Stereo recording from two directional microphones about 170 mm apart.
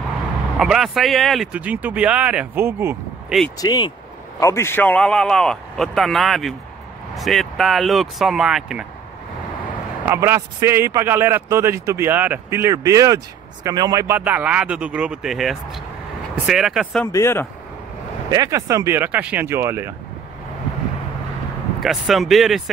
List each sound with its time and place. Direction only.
0.6 s a man's voice: centre (ahead or behind)
3.5 s a man's voice: 25° left (ahead or behind); by 8.8 s 5° right (ahead or behind)
10.0 s a man's voice: 15° right (ahead or behind)
17.0 s speech: 15° left (ahead or behind)
18.3 s a man's voice: 20° right (ahead or behind)
21.7 s a man's voice: centre (ahead or behind)